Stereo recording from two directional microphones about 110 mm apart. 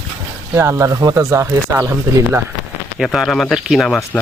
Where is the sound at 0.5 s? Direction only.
25° right (ahead or behind).